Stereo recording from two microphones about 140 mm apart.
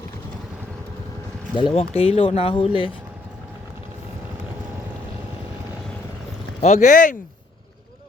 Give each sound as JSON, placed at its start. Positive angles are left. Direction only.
{"t": 1.5, "sound": "speech", "side_deg": 40}
{"t": 6.6, "sound": "speech", "side_deg": 60}